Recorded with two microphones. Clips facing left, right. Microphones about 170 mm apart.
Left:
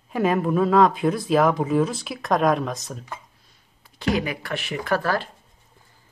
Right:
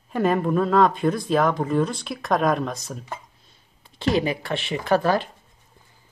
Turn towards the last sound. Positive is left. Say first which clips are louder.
# right 3 dB
turn(degrees=-20)  # may be behind; listen again after turning